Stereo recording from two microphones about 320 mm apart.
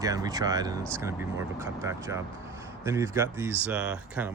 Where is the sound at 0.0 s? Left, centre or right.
Centre.